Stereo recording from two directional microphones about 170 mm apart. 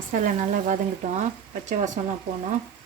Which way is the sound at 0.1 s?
50° right (ahead or behind).